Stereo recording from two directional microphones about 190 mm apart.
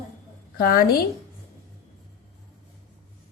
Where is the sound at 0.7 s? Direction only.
50° left (ahead or behind).